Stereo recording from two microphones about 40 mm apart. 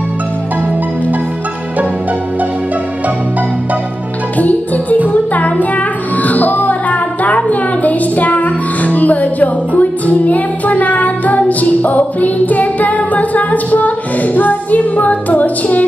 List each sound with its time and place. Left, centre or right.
4.4 s music: left